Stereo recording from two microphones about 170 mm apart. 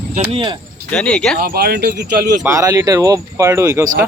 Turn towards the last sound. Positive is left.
turn(degrees=-15)  # may be behind; listen again after turning